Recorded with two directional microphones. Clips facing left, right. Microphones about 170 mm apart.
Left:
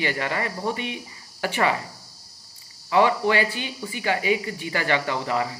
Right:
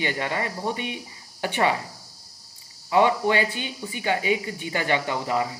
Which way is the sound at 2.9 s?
20° right (ahead or behind).